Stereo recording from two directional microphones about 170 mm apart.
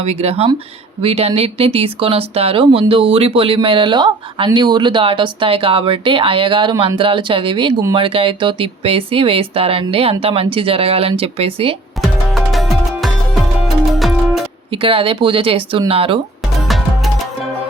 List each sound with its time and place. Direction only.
0.0 s speech: 35° right (ahead or behind)
12.0 s music: centre (ahead or behind)
14.7 s speech: 35° right (ahead or behind)